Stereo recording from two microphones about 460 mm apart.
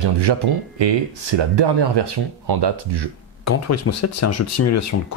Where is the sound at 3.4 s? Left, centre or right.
Left.